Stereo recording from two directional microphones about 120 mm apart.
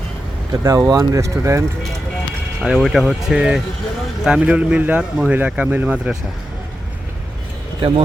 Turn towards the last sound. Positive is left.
turn(degrees=-50)  # may be behind; listen again after turning